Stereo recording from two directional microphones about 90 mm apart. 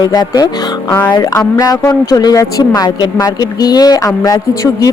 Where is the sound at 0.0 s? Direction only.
45° left (ahead or behind).